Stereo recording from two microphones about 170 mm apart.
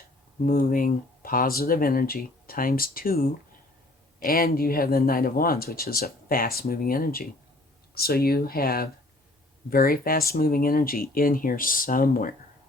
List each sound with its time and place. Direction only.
0.4 s speech: 55° left (ahead or behind)